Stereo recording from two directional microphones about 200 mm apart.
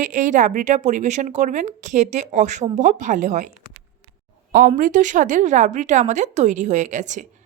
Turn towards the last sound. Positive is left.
turn(degrees=-40)  # may be behind; listen again after turning